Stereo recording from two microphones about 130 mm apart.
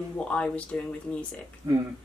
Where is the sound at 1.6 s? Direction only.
20° right (ahead or behind).